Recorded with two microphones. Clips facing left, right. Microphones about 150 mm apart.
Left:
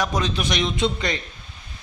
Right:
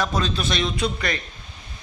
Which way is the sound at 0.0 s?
15° left (ahead or behind).